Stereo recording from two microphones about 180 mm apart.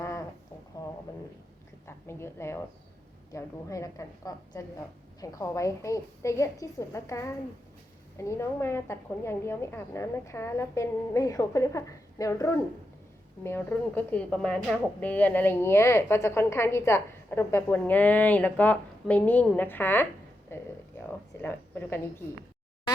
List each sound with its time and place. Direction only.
2.0 s a woman's voice: 15° left (ahead or behind)